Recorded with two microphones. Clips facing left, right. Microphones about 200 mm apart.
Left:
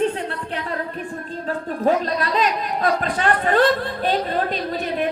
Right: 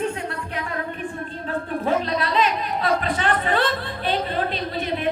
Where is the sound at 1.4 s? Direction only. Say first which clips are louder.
Left 3 dB; 40° left (ahead or behind).